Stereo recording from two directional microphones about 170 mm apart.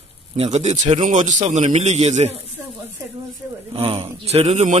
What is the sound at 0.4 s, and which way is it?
A man's voice, 40° right (ahead or behind).